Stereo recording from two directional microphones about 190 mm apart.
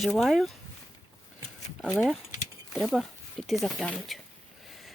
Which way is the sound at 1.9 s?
Centre (ahead or behind).